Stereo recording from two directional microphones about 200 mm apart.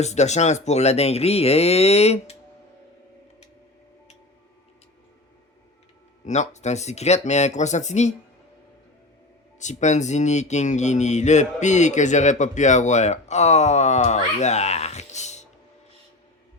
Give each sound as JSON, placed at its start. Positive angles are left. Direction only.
{"t": 0.0, "sound": "speech", "side_deg": 35}
{"t": 6.2, "sound": "speech", "side_deg": 35}
{"t": 9.6, "sound": "speech", "side_deg": 35}